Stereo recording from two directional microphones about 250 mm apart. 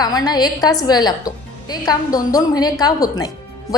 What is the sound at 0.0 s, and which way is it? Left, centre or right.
A woman's voice, centre.